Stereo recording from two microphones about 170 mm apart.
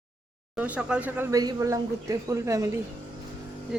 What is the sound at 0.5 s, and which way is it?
A woman's voice, 5° right (ahead or behind).